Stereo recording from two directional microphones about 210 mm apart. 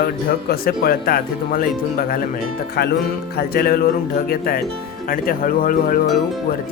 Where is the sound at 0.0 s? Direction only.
45° left (ahead or behind).